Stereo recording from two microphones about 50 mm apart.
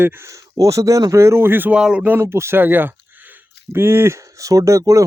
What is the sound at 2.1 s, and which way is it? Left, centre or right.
Speech, right.